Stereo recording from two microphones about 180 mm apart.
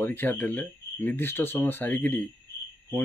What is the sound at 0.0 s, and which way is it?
Speech, 10° left (ahead or behind).